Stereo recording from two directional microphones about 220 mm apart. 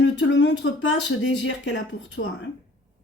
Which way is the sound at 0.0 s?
55° left (ahead or behind).